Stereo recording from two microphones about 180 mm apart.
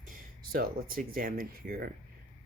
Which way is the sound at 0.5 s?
50° right (ahead or behind).